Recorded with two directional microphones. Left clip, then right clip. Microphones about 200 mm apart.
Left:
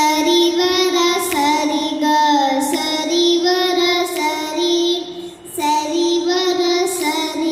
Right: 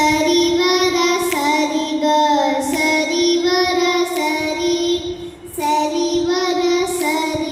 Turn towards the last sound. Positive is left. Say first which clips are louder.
# even
turn(degrees=45)  # may be behind; listen again after turning